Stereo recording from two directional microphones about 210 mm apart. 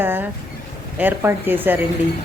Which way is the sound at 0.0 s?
10° right (ahead or behind).